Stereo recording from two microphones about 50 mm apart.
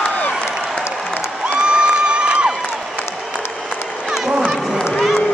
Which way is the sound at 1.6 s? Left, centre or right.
Centre.